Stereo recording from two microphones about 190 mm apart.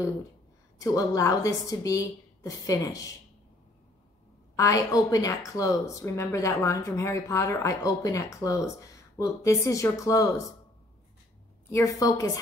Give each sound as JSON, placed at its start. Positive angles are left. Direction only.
{"t": 0.7, "sound": "a woman's voice", "side_deg": 20}
{"t": 4.6, "sound": "a woman's voice", "side_deg": 15}
{"t": 11.7, "sound": "a woman's voice", "side_deg": 15}